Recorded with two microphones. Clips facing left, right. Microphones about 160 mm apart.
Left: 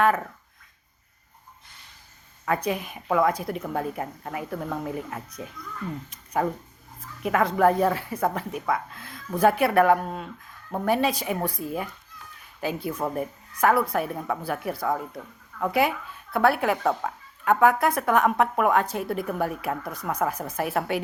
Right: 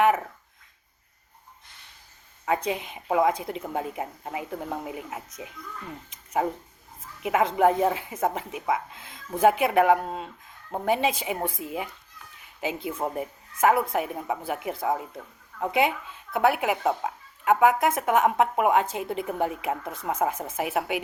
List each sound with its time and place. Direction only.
2.5 s speech: 20° right (ahead or behind)
7.2 s speech: 20° right (ahead or behind)